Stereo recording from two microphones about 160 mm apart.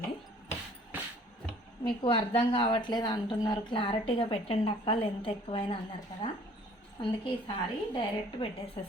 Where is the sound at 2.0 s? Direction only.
35° left (ahead or behind).